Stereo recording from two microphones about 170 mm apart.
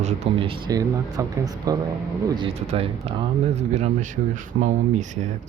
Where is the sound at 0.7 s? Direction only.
20° right (ahead or behind).